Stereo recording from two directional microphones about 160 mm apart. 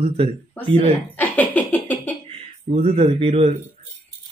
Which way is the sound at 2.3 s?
40° right (ahead or behind).